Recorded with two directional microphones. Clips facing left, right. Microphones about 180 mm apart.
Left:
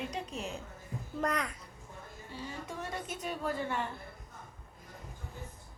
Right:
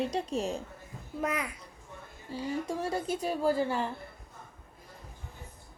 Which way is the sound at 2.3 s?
35° right (ahead or behind).